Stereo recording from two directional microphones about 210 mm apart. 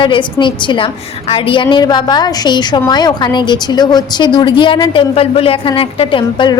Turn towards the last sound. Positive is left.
turn(degrees=20)  # may be behind; listen again after turning